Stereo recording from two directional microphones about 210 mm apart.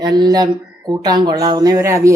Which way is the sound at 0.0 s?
20° right (ahead or behind).